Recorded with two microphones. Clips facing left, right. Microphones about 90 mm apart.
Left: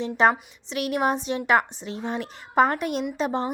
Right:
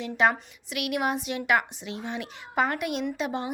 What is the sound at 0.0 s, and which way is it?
A woman's voice, 35° left (ahead or behind).